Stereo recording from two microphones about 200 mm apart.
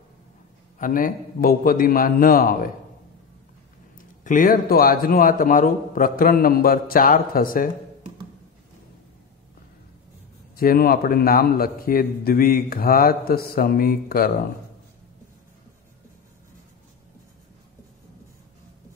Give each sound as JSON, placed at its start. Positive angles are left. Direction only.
{"t": 0.7, "sound": "a man's voice", "side_deg": 40}
{"t": 4.2, "sound": "a man's voice", "side_deg": 45}
{"t": 10.5, "sound": "a man's voice", "side_deg": 50}